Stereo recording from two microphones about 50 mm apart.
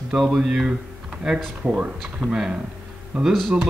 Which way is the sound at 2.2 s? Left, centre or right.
Centre.